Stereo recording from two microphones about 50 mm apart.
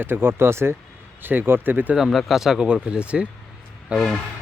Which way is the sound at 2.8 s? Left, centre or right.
Right.